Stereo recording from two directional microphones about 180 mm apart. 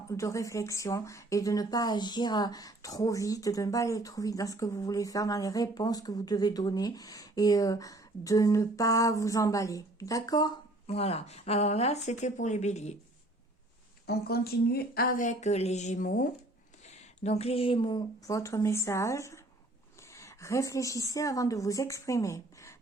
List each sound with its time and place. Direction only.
0.1 s speech: 15° left (ahead or behind)
10.8 s speech: 35° left (ahead or behind)
14.1 s speech: 60° left (ahead or behind)
17.2 s a woman's voice: 35° left (ahead or behind); by 22.7 s 15° left (ahead or behind)